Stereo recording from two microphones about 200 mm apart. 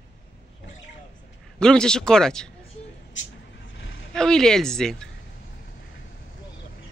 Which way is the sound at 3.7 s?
70° left (ahead or behind).